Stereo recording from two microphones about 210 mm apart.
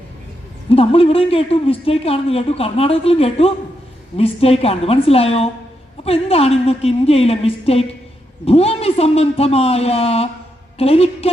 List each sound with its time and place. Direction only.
0.7 s speech: 25° left (ahead or behind)